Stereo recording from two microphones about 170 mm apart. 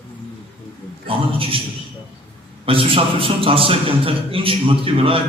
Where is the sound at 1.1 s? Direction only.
35° right (ahead or behind).